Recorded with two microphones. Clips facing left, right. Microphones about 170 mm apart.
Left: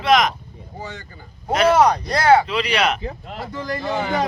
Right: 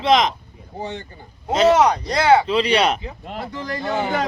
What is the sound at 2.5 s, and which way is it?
Speech, 30° right (ahead or behind).